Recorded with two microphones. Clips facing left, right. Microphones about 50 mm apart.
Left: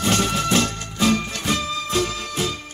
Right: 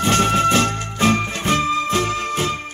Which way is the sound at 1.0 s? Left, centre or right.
Right.